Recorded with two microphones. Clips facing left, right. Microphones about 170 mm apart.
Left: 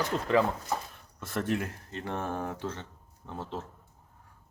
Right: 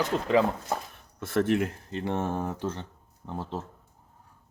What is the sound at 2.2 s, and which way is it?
Speech, 35° right (ahead or behind).